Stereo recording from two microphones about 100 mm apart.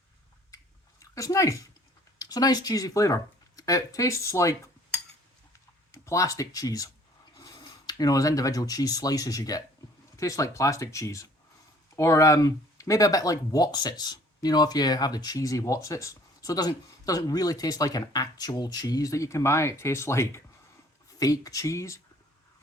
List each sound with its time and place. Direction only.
0.5 s chewing: 35° left (ahead or behind)
2.1 s speech: 40° left (ahead or behind)
5.9 s speech: 30° left (ahead or behind)